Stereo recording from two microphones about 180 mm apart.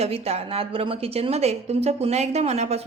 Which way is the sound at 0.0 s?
35° right (ahead or behind).